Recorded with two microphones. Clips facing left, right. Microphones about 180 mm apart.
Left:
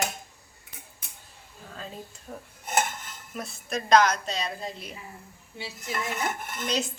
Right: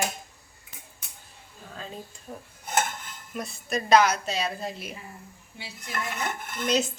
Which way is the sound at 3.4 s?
Centre (ahead or behind).